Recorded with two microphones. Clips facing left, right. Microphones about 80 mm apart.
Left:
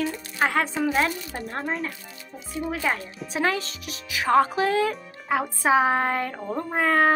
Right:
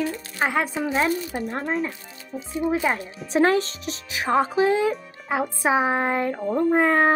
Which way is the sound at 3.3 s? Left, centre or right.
Right.